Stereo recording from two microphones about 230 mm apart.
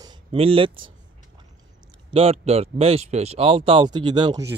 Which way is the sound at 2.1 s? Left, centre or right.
Right.